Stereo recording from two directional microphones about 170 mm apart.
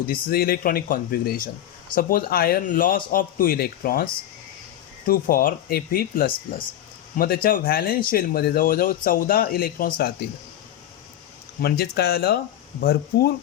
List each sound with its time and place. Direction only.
0.1 s speech: 60° left (ahead or behind)
11.6 s speech: 65° left (ahead or behind)